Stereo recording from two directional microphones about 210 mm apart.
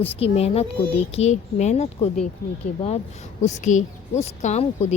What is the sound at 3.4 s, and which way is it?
Speech, 35° left (ahead or behind).